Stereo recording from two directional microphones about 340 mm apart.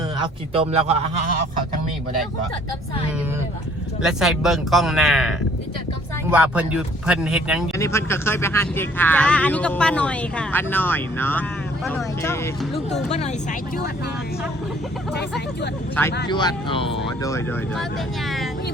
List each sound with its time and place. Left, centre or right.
0.2 s a man's voice: centre
4.0 s speech: centre
13.1 s speech: centre
16.3 s speech: centre